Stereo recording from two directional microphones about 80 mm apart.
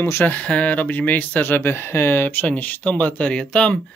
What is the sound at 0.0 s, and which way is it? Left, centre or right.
Speech, left.